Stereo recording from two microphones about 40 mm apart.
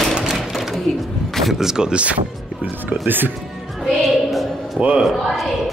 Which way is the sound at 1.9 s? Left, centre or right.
Right.